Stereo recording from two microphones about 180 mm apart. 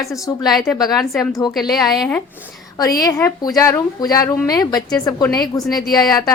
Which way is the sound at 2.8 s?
20° left (ahead or behind).